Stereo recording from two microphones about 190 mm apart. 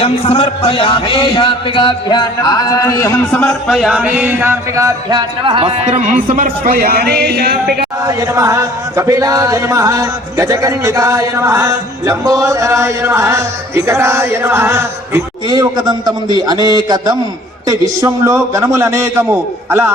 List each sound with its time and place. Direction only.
0.0 s a man's voice: 30° left (ahead or behind); by 3.4 s 15° left (ahead or behind)
3.4 s music: centre (ahead or behind); by 7.9 s 55° right (ahead or behind)
8.0 s speech: 15° right (ahead or behind)